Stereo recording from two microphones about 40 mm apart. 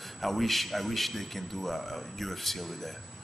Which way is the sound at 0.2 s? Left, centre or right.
Centre.